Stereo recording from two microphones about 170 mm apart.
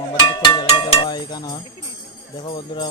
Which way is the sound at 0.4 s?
25° left (ahead or behind).